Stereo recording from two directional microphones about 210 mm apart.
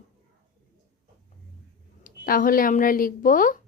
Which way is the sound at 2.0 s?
40° left (ahead or behind).